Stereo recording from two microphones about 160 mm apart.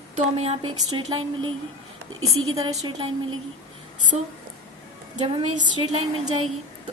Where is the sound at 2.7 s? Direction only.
35° right (ahead or behind).